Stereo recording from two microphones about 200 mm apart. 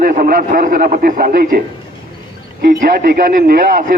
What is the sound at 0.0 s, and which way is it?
A man's voice, 45° right (ahead or behind).